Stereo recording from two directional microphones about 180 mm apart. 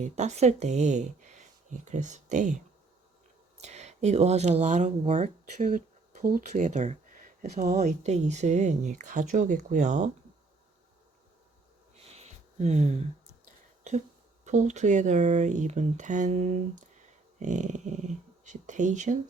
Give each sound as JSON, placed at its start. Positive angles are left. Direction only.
{"t": 0.0, "sound": "speech", "side_deg": -40}
{"t": 3.6, "sound": "speech", "side_deg": -40}
{"t": 12.0, "sound": "a sound", "side_deg": -40}
{"t": 14.4, "sound": "speech", "side_deg": -40}